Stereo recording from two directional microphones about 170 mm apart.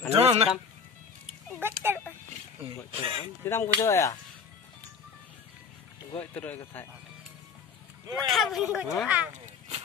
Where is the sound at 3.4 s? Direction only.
15° left (ahead or behind).